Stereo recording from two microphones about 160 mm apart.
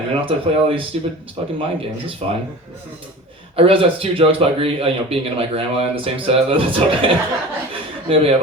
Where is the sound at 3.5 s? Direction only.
35° right (ahead or behind).